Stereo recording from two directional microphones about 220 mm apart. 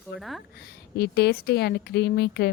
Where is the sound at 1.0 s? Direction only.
45° left (ahead or behind).